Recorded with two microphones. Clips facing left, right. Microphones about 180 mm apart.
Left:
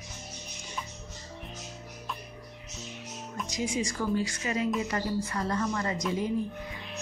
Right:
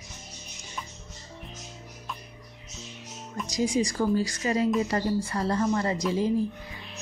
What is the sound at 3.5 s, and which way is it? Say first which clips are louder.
Speech: right 6 dB; 35° right (ahead or behind).